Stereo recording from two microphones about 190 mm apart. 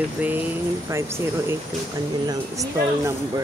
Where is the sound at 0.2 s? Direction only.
10° right (ahead or behind).